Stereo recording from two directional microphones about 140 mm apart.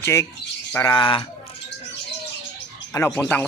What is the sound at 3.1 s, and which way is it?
Speech, 10° left (ahead or behind).